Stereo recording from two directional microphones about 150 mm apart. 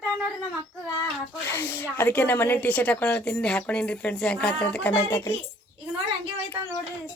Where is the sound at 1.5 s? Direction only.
15° left (ahead or behind).